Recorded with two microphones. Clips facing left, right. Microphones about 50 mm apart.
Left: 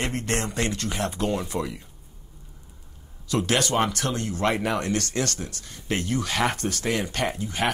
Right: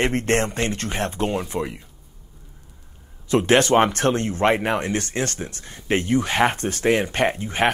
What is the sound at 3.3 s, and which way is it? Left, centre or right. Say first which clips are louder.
Speech: right 7 dB; right.